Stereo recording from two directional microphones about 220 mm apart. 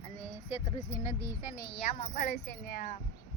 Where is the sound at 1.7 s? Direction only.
40° left (ahead or behind).